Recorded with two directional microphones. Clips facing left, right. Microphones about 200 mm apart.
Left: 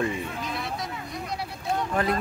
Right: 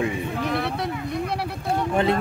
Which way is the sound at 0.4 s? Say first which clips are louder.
Right 7 dB; 65° right (ahead or behind).